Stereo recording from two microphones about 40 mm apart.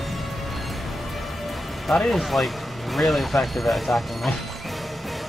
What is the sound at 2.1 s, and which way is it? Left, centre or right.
Speech, centre.